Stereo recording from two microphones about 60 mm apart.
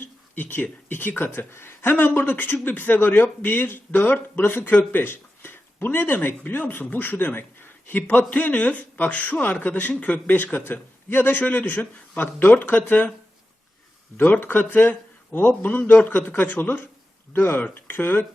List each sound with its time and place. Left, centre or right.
0.0 s speech: left
14.2 s speech: left